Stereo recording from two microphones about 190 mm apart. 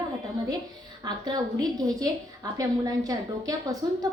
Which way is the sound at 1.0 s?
20° right (ahead or behind).